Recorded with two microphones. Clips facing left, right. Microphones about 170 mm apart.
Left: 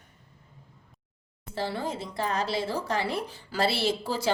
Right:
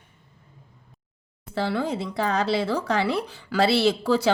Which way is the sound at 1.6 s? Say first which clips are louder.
Right 6 dB; 75° right (ahead or behind).